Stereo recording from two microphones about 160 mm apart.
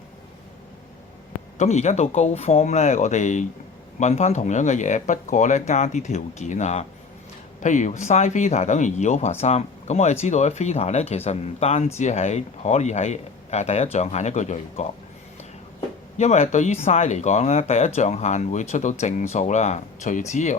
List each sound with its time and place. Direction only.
1.5 s speech: 45° left (ahead or behind)
16.1 s speech: 45° left (ahead or behind)